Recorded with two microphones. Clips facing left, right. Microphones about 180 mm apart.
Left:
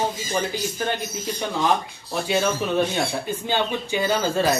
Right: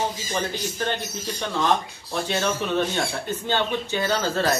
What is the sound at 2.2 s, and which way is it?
Speech, 10° left (ahead or behind).